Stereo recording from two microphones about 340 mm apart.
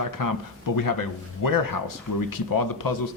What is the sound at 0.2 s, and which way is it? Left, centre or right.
Speech, left.